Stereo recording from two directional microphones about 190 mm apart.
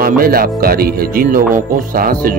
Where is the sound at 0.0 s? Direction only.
50° right (ahead or behind).